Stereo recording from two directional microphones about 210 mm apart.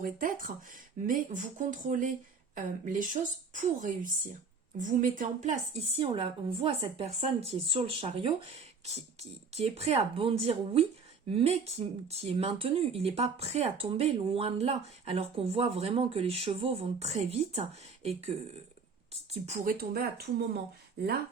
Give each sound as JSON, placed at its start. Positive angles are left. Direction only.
{"t": 0.0, "sound": "speech", "side_deg": -40}